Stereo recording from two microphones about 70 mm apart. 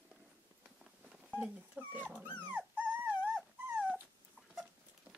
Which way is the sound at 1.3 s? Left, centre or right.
Right.